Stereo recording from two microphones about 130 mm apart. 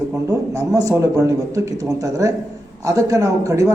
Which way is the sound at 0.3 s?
25° right (ahead or behind).